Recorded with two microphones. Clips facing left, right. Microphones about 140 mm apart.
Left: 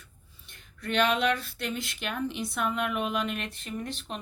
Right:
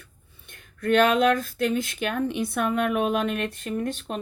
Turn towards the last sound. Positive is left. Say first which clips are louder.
# right 7 dB
turn(degrees=-45)  # may be behind; listen again after turning